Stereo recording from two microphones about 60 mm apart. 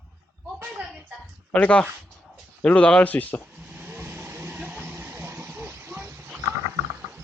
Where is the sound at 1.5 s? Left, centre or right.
Left.